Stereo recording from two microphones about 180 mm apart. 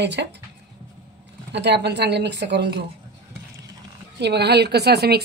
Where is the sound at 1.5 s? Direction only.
70° right (ahead or behind).